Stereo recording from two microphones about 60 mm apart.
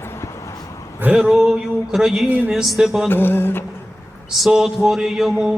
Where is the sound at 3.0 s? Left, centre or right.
Left.